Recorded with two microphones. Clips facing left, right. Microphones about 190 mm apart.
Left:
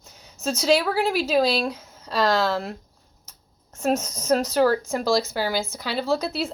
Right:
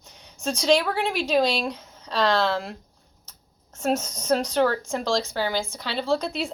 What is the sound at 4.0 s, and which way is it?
A woman's voice, 10° left (ahead or behind).